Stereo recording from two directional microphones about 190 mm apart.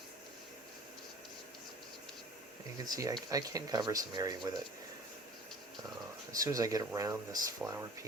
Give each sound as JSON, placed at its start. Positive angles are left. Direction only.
{"t": 2.8, "sound": "speech", "side_deg": -20}
{"t": 6.3, "sound": "speech", "side_deg": -20}